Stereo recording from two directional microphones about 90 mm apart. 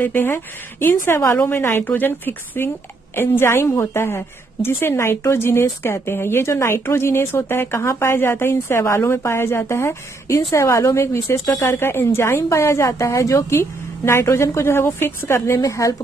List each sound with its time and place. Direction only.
0.0 s a woman's voice: 25° left (ahead or behind)